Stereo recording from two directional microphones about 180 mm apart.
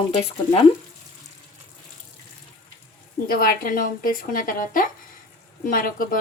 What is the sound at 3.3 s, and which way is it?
Speech, 50° left (ahead or behind).